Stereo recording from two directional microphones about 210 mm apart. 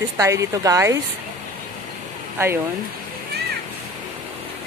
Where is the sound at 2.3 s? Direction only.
10° right (ahead or behind).